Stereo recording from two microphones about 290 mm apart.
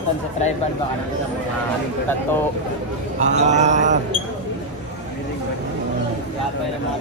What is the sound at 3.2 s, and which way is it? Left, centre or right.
Speech, right.